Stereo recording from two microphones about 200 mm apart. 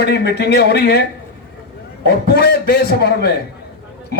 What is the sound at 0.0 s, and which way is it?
Speech, 55° left (ahead or behind).